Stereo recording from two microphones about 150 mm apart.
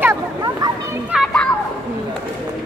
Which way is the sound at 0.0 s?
20° right (ahead or behind).